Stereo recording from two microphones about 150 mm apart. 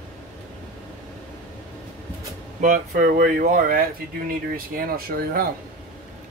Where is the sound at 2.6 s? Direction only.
60° right (ahead or behind).